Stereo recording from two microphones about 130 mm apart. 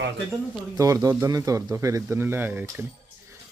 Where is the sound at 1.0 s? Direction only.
25° right (ahead or behind).